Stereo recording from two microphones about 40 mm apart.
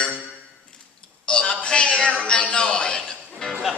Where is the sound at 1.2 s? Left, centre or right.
Left.